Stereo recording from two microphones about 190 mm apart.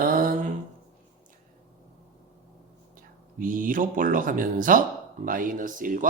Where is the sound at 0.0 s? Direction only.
45° right (ahead or behind).